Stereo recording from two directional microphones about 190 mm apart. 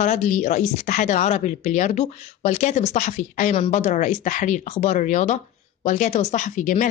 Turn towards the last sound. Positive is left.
turn(degrees=40)  # may be behind; listen again after turning